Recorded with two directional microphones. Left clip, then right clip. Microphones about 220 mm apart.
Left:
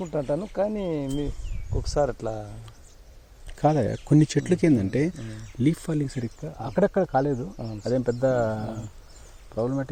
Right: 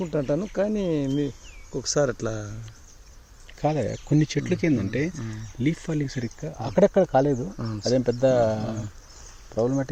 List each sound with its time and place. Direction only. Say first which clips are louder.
0.0 s speech: right 1 dB; 45° right (ahead or behind)
3.6 s speech: left 3 dB; 20° left (ahead or behind); by 9.9 s 5° right (ahead or behind)